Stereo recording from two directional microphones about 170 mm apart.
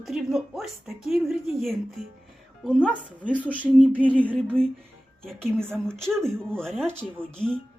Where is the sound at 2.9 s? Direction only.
10° left (ahead or behind).